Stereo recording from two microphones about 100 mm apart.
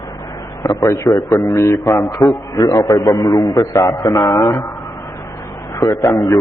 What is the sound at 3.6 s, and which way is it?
Speech, 35° left (ahead or behind).